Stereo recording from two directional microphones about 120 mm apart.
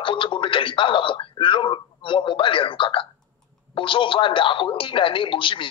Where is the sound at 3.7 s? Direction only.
45° left (ahead or behind).